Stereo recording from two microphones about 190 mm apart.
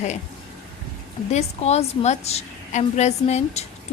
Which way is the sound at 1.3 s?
35° left (ahead or behind).